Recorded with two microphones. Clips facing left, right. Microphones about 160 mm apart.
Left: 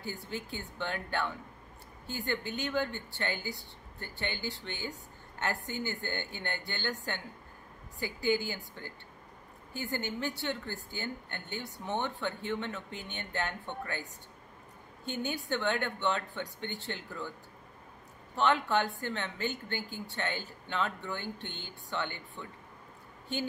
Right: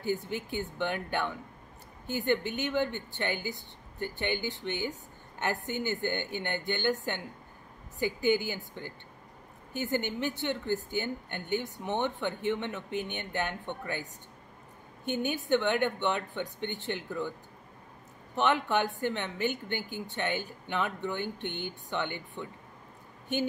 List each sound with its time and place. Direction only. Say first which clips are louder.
0.0 s a woman's voice: right 7 dB; 20° right (ahead or behind)
15.0 s a woman's voice: right 6 dB; 20° right (ahead or behind)
18.3 s a woman's voice: right 1 dB; 20° right (ahead or behind)